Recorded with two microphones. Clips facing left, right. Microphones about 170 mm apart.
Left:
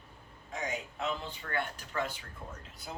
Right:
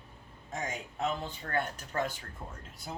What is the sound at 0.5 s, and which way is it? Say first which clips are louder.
Speech: even; 45° right (ahead or behind).